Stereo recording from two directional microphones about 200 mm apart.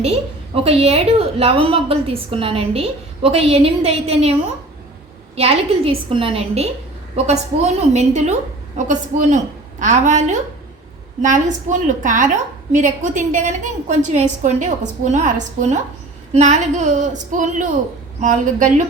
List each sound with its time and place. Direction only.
0.0 s a woman's voice: 30° right (ahead or behind)
5.4 s a woman's voice: 30° right (ahead or behind)